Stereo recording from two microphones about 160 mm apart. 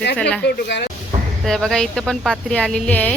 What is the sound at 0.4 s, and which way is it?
Speech, 90° left.